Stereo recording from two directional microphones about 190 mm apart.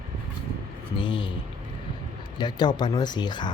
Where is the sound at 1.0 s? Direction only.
25° left (ahead or behind).